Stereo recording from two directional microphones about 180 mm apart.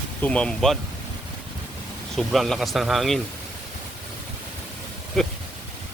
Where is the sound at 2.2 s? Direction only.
Centre (ahead or behind).